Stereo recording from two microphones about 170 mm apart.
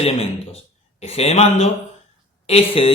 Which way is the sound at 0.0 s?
35° left (ahead or behind).